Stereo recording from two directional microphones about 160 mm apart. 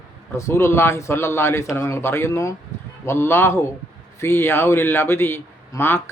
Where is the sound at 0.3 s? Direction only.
15° left (ahead or behind).